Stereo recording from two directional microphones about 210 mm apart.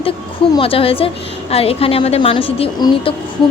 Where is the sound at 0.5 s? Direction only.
25° left (ahead or behind).